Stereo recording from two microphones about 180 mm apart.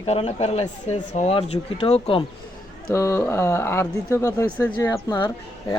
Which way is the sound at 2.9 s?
15° left (ahead or behind).